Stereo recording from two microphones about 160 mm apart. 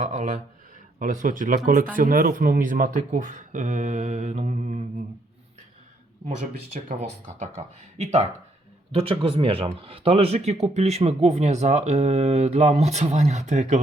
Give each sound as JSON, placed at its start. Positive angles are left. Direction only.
{"t": 0.0, "sound": "speech", "side_deg": -50}
{"t": 6.9, "sound": "speech", "side_deg": -45}